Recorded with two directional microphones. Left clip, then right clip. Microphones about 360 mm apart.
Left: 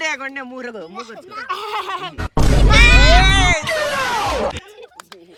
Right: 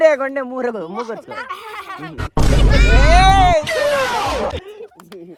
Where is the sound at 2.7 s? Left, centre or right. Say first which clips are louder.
Left 5 dB; left.